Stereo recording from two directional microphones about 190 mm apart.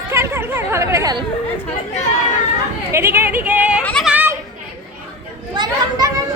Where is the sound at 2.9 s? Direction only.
10° right (ahead or behind).